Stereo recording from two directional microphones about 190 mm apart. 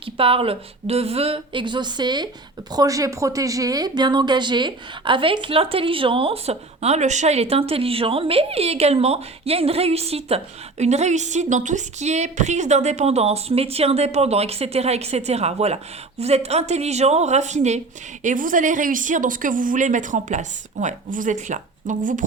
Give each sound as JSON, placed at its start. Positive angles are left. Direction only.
{"t": 0.2, "sound": "speech", "side_deg": -30}